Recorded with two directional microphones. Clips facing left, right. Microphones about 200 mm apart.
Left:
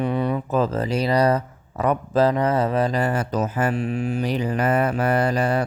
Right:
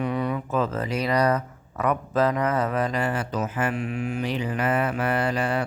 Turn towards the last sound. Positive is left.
turn(degrees=40)  # may be behind; listen again after turning